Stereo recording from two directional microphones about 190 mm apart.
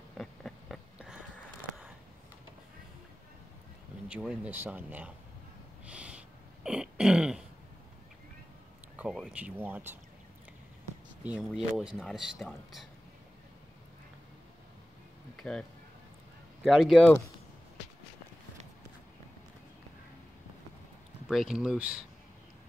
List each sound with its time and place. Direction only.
0.2 s a sound: 5° left (ahead or behind)
4.1 s speech: 5° right (ahead or behind)
5.9 s throat clearing: 5° right (ahead or behind)
8.9 s speech: 5° right (ahead or behind)
11.2 s speech: 5° right (ahead or behind)
15.3 s music: 5° left (ahead or behind)
16.6 s speech: centre (ahead or behind)
21.3 s speech: centre (ahead or behind)